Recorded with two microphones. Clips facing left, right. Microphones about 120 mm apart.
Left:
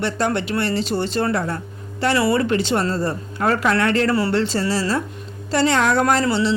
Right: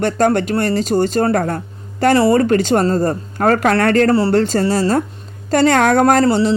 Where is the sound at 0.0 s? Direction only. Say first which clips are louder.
Right 7 dB; 45° right (ahead or behind).